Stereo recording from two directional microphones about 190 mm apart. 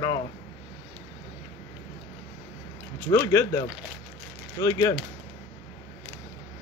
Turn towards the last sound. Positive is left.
turn(degrees=20)  # may be behind; listen again after turning